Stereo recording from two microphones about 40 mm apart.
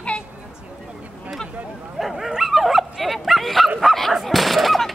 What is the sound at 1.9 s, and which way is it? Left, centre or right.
Bow-wow, centre.